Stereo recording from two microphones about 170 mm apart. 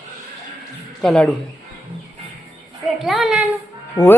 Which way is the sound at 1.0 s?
5° left (ahead or behind).